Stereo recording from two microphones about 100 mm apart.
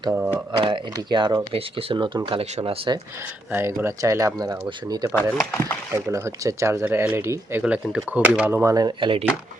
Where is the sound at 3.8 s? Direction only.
35° right (ahead or behind).